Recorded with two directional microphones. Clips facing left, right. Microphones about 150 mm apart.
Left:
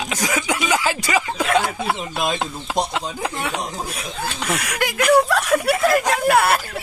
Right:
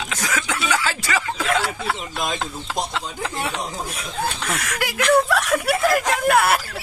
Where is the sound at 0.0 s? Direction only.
10° left (ahead or behind).